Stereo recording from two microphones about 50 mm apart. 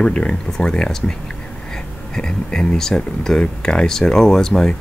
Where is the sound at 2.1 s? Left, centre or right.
Centre.